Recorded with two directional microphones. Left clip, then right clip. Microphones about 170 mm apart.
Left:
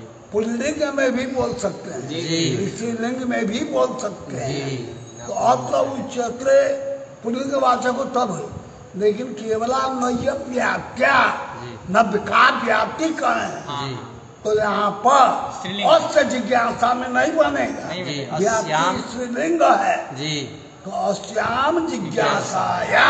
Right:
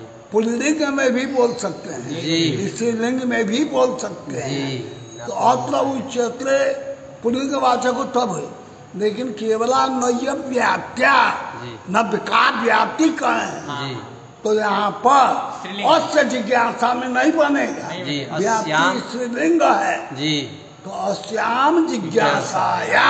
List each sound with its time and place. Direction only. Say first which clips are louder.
0.3 s a man's voice: right 3 dB; 35° right (ahead or behind)
2.2 s a man's voice: right 3 dB; 15° right (ahead or behind)
2.6 s a man's voice: right 4 dB; 30° right (ahead or behind)